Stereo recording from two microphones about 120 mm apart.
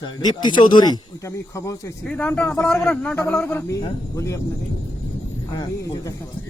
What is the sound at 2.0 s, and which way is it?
A man's voice, 10° left (ahead or behind).